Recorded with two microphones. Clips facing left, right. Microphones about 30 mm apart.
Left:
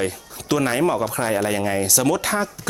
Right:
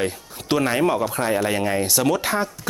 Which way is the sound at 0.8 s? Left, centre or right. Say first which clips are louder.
Even; centre.